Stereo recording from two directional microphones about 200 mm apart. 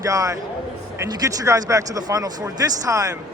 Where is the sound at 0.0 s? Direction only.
15° right (ahead or behind).